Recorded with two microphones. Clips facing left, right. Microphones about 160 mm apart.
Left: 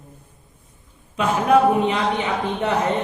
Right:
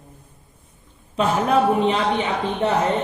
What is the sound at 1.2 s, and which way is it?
Speech, 30° right (ahead or behind).